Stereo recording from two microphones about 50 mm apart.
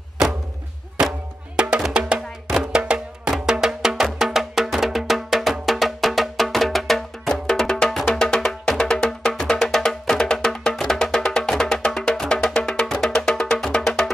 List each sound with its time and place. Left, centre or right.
1.6 s music: centre